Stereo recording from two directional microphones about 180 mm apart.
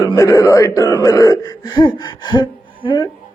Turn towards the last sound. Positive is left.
turn(degrees=25)  # may be behind; listen again after turning